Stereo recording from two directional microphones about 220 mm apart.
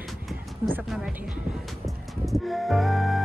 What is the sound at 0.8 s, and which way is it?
Speech, 5° right (ahead or behind).